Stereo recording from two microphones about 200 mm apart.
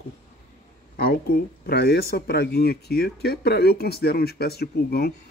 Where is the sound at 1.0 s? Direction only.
50° left (ahead or behind).